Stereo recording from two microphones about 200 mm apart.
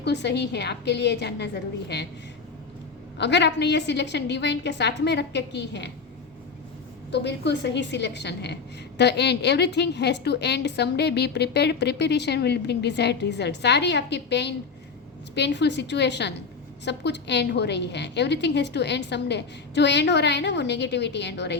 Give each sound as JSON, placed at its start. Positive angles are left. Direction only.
{"t": 0.0, "sound": "a woman's voice", "side_deg": 60}
{"t": 3.2, "sound": "a woman's voice", "side_deg": 60}
{"t": 7.1, "sound": "a woman's voice", "side_deg": 60}